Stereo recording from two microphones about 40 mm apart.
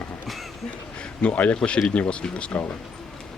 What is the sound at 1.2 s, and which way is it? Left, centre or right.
Speech, left.